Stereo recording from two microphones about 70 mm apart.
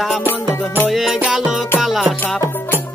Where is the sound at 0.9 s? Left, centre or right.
Centre.